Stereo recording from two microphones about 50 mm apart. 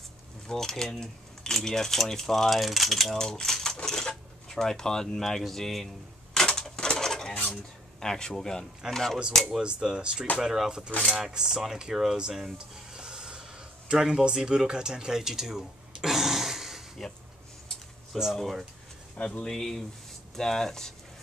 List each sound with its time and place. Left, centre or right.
0.5 s speech: centre
6.3 s a sound: centre
6.8 s bird: centre
8.0 s speech: centre
9.6 s speech: centre
12.5 s a sound: centre
14.2 s speech: centre
18.3 s speech: centre
19.1 s speech: left
19.4 s speech: centre